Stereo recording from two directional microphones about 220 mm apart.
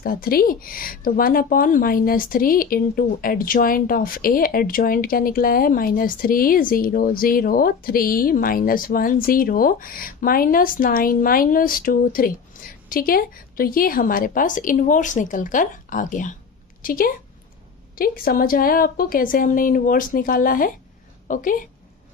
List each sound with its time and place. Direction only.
0.0 s a woman's voice: 40° left (ahead or behind)